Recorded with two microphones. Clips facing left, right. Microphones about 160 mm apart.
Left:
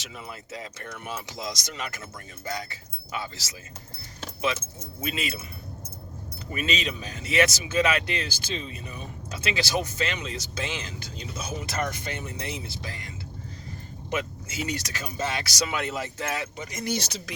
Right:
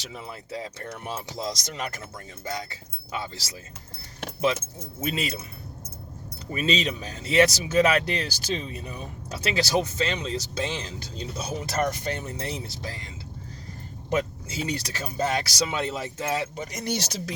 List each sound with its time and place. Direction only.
0.0 s speech: 30° right (ahead or behind)
4.5 s speech: 45° right (ahead or behind)
6.5 s speech: 30° right (ahead or behind)
14.1 s speech: 35° right (ahead or behind)